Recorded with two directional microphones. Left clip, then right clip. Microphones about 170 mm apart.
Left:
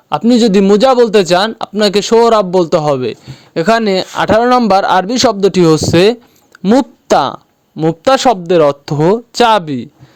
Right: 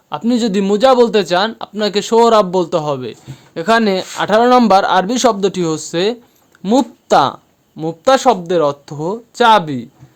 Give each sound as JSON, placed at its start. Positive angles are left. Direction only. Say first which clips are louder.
{"t": 0.2, "sound": "speech", "louder": "left 7 dB", "side_deg": 35}
{"t": 6.6, "sound": "speech", "louder": "left 3 dB", "side_deg": 30}
{"t": 7.1, "sound": "speech", "louder": "left 1 dB", "side_deg": 45}